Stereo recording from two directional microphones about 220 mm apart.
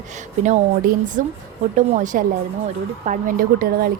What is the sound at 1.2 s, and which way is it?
A woman's voice, 35° right (ahead or behind).